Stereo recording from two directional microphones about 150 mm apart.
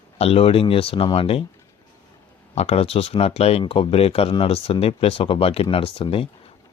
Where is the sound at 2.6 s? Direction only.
45° left (ahead or behind).